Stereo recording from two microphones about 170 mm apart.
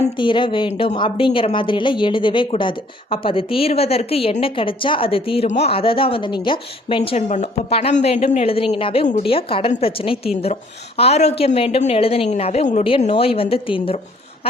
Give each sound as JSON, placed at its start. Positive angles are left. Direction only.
{"t": 0.2, "sound": "a woman's voice", "side_deg": 30}